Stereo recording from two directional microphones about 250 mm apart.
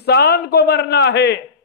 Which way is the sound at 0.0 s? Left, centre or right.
Left.